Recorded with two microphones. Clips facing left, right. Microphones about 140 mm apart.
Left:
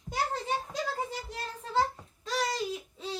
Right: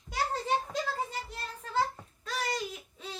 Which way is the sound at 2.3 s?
30° left (ahead or behind).